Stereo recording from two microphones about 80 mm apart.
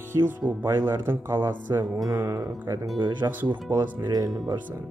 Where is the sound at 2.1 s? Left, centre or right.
Right.